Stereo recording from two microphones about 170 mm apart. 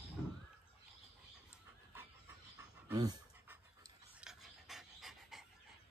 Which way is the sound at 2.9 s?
25° right (ahead or behind).